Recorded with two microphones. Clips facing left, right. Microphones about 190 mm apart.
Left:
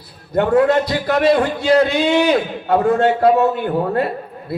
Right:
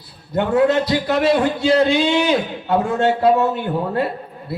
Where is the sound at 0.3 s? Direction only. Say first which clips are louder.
Left 2 dB; 50° left (ahead or behind).